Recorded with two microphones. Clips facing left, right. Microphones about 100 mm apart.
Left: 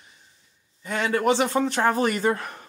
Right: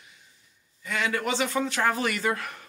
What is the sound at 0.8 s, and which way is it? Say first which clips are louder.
Speech: left 6 dB; 40° left (ahead or behind).